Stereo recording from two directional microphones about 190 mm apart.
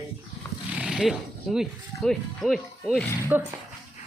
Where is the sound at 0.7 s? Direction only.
5° right (ahead or behind).